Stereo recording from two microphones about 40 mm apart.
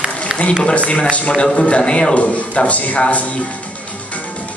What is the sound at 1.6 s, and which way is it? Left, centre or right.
A man's voice, left.